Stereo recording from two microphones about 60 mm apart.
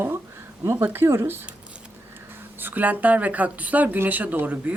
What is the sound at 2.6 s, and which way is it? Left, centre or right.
Speech, right.